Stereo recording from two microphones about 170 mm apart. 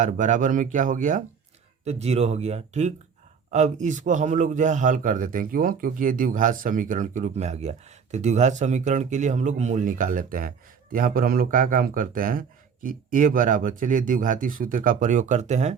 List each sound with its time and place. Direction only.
0.0 s a man's voice: 50° right (ahead or behind)
1.8 s a man's voice: 40° right (ahead or behind)